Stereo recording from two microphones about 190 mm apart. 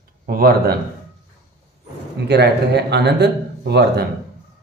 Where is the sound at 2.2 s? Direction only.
60° right (ahead or behind).